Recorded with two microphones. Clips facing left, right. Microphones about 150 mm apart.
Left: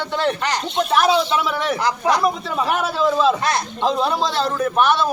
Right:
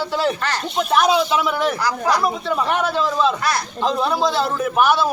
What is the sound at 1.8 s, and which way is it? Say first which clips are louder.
Speech: left 1 dB; 20° left (ahead or behind).